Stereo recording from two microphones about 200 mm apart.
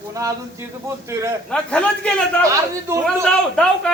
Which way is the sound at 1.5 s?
5° left (ahead or behind).